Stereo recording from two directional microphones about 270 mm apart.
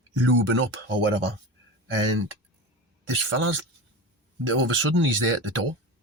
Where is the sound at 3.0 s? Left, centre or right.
Right.